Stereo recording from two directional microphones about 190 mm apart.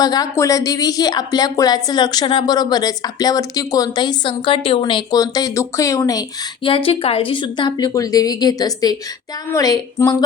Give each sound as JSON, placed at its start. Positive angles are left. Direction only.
{"t": 0.0, "sound": "speech", "side_deg": 20}